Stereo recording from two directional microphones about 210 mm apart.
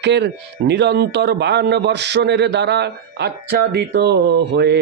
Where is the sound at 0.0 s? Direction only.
55° right (ahead or behind).